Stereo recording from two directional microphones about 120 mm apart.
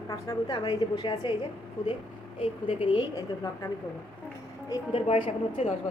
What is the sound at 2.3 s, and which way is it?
Speech, 50° left (ahead or behind).